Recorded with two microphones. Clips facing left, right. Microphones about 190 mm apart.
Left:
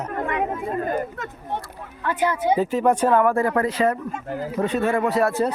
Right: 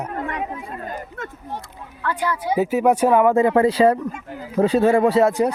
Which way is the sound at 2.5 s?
10° right (ahead or behind).